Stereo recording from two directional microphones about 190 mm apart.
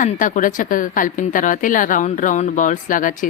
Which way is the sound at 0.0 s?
45° left (ahead or behind).